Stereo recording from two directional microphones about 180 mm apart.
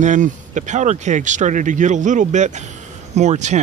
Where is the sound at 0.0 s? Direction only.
45° right (ahead or behind).